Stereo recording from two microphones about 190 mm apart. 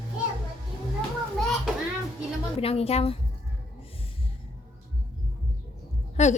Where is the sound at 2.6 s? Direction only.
30° left (ahead or behind).